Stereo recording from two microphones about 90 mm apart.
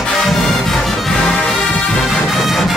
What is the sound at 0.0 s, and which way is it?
Music, centre (ahead or behind).